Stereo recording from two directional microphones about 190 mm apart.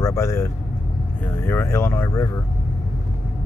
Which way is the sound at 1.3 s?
10° left (ahead or behind).